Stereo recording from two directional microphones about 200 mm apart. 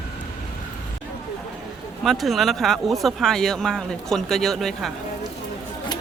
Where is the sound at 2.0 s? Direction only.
Centre (ahead or behind).